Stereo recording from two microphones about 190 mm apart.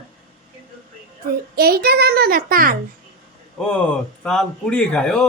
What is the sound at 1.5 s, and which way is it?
A child's voice, 55° right (ahead or behind).